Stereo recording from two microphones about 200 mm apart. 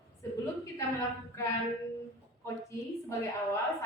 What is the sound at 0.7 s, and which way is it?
A woman's voice, 15° left (ahead or behind).